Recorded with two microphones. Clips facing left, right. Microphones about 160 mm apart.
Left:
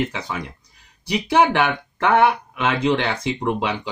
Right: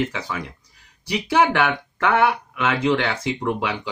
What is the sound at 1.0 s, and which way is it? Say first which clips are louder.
Speech: left 2 dB; 20° left (ahead or behind).